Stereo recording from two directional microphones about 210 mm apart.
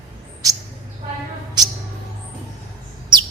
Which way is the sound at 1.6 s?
20° right (ahead or behind).